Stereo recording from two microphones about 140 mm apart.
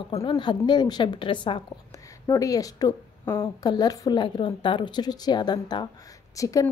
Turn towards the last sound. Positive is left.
turn(degrees=25)  # may be behind; listen again after turning